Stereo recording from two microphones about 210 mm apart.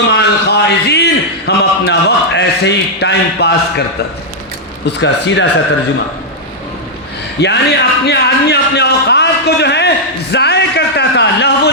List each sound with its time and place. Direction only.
0.1 s a man's voice: 55° left (ahead or behind)
4.9 s speech: 55° left (ahead or behind)
7.3 s a man's voice: 55° left (ahead or behind)
10.3 s a sound: 50° left (ahead or behind)